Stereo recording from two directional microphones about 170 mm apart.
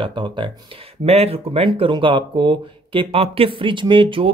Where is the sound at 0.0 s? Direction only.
30° right (ahead or behind).